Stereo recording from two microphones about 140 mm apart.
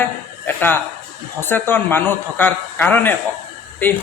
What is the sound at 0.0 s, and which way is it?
Music, 15° left (ahead or behind).